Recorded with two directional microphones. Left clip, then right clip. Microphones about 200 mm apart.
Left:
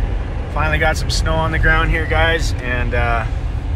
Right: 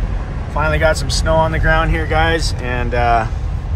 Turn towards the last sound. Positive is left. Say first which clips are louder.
# right 5 dB
turn(degrees=-20)  # may be behind; listen again after turning